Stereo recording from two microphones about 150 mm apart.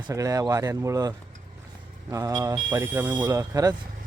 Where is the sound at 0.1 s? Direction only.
20° right (ahead or behind).